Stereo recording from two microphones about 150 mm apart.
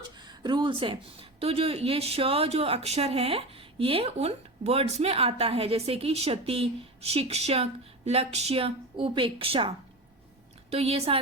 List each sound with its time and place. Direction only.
0.0 s speech: 30° right (ahead or behind)